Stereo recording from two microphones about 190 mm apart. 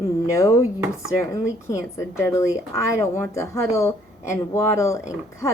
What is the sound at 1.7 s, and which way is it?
A woman's voice, 15° left (ahead or behind).